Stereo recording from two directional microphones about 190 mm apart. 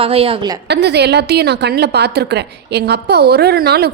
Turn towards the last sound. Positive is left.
turn(degrees=-60)  # may be behind; listen again after turning